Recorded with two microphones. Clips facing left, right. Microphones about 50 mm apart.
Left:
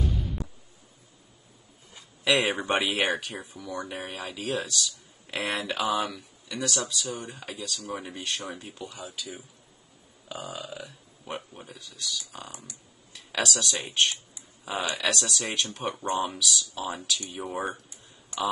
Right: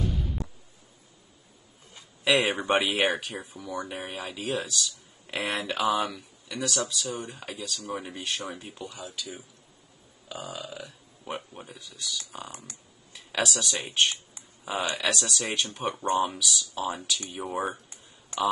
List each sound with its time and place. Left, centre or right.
0.0 s a sound: centre
2.0 s speech: centre
12.4 s speech: right
13.1 s speech: centre